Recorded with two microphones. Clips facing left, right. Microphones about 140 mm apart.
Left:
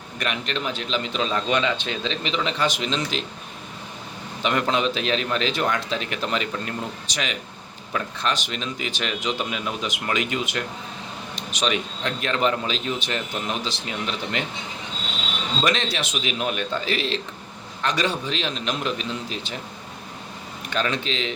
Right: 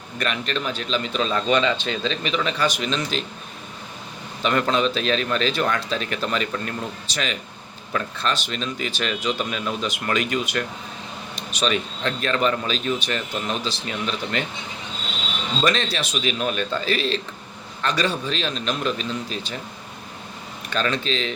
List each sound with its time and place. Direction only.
0.2 s a man's voice: 15° left (ahead or behind)
2.2 s a man's voice: 20° left (ahead or behind)
4.4 s a man's voice: 15° left (ahead or behind)
15.6 s a man's voice: 20° left (ahead or behind)
20.7 s a man's voice: 15° left (ahead or behind)